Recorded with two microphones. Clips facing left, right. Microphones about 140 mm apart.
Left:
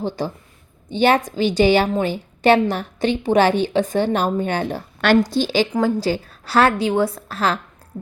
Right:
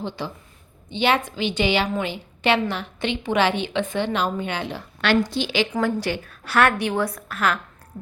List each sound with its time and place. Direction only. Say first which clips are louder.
0.2 s a woman's voice: left 6 dB; 40° left (ahead or behind)